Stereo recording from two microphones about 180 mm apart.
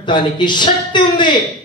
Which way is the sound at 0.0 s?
25° left (ahead or behind).